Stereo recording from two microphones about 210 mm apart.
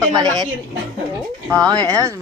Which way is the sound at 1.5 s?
20° right (ahead or behind).